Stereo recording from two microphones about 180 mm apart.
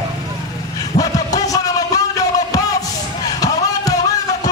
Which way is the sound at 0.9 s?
40° left (ahead or behind).